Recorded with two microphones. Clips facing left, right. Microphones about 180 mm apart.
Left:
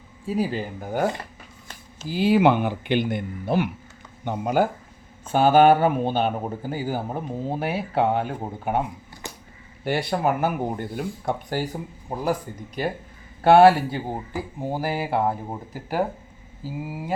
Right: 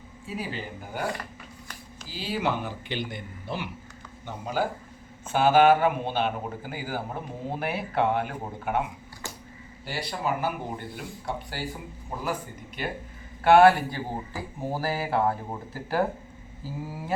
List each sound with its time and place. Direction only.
0.3 s speech: 40° left (ahead or behind)
2.0 s speech: 55° left (ahead or behind)
5.4 s speech: 35° left (ahead or behind)
9.2 s a sound: 20° left (ahead or behind)
9.8 s speech: 55° left (ahead or behind); by 14.0 s 30° left (ahead or behind)
14.6 s speech: 15° left (ahead or behind)